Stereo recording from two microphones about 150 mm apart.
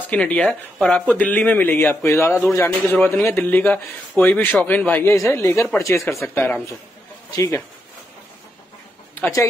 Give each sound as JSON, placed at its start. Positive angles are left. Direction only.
{"t": 0.1, "sound": "speech", "side_deg": 5}
{"t": 5.1, "sound": "speech", "side_deg": 20}
{"t": 7.2, "sound": "speech", "side_deg": 25}
{"t": 9.1, "sound": "speech", "side_deg": 15}